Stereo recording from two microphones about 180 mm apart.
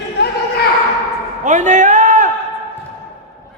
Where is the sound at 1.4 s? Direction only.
40° right (ahead or behind).